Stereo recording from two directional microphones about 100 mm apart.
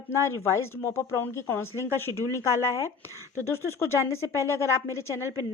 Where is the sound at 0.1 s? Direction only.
30° left (ahead or behind).